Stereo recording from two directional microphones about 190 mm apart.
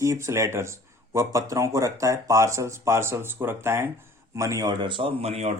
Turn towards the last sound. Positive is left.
turn(degrees=-35)  # may be behind; listen again after turning